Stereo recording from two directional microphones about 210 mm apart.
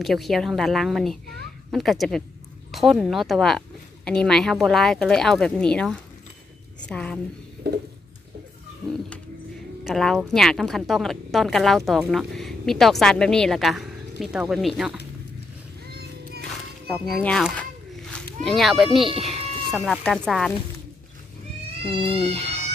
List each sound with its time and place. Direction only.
0.0 s a woman's voice: centre (ahead or behind)
7.7 s a sound: 50° right (ahead or behind)
9.8 s a woman's voice: centre (ahead or behind)
17.0 s a woman's voice: 5° left (ahead or behind)
22.0 s speech: 25° right (ahead or behind)